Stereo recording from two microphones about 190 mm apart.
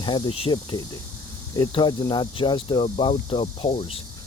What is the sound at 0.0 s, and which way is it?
Speech, 30° left (ahead or behind).